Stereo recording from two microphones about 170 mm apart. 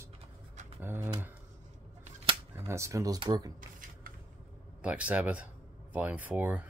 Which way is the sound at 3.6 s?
50° right (ahead or behind).